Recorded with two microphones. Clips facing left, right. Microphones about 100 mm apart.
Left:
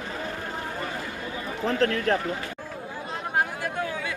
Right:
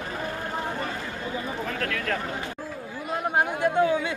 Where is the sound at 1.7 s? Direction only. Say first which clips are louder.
Left 9 dB; 35° left (ahead or behind).